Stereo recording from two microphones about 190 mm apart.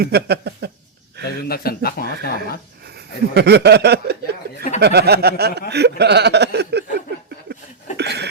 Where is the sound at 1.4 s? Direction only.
55° left (ahead or behind).